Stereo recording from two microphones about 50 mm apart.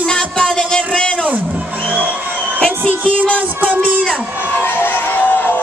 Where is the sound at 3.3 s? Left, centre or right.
Right.